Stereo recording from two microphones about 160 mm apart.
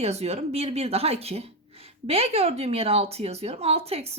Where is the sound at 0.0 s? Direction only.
40° right (ahead or behind).